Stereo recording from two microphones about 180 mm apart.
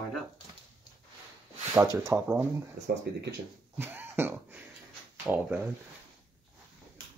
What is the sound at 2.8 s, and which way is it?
Speech, 70° right (ahead or behind).